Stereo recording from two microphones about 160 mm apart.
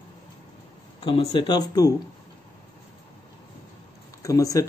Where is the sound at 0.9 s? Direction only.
30° left (ahead or behind).